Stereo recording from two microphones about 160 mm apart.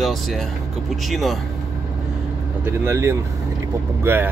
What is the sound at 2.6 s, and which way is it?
Speech, 15° right (ahead or behind).